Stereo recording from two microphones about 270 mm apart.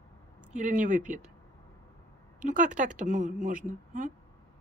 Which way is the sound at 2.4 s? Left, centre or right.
Right.